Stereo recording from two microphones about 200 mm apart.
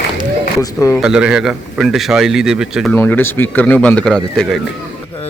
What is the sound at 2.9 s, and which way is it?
Speech, 10° left (ahead or behind).